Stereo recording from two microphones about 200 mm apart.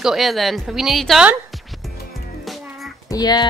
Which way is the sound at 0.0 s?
Centre (ahead or behind).